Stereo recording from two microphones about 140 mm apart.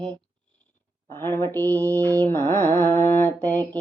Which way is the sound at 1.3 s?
15° left (ahead or behind).